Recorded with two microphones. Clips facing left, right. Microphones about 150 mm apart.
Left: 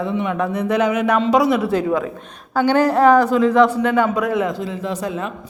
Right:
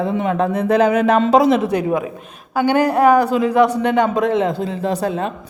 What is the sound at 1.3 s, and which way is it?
Speech, 20° right (ahead or behind).